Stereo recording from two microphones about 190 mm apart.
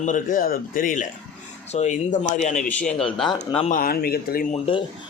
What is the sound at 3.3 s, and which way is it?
Speech, 30° left (ahead or behind).